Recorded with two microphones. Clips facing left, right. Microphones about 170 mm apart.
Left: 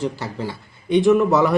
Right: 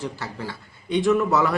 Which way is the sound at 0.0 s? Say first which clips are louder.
Left 6 dB; 25° left (ahead or behind).